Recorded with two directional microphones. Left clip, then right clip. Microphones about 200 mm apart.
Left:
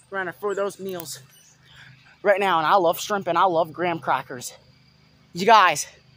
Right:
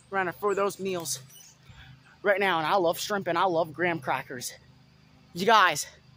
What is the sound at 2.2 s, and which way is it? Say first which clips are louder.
Speech: left 5 dB; 20° left (ahead or behind).